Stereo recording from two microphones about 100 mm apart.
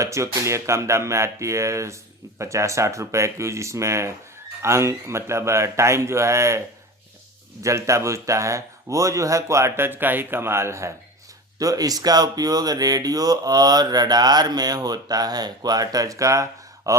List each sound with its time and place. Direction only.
0.0 s speech: 30° right (ahead or behind)
7.6 s speech: 30° right (ahead or behind)